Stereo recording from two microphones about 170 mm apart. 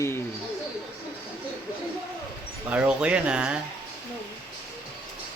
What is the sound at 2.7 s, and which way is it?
Speech, 5° right (ahead or behind).